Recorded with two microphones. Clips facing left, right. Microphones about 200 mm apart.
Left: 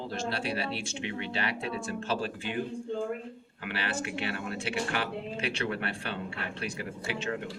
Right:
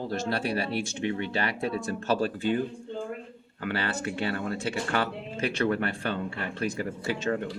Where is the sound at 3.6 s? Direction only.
40° right (ahead or behind).